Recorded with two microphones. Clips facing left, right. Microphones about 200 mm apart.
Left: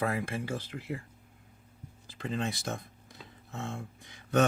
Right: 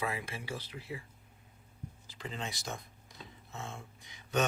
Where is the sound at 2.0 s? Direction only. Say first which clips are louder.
Left 8 dB; 55° left (ahead or behind).